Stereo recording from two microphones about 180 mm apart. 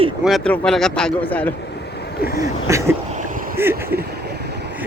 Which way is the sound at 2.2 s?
55° left (ahead or behind).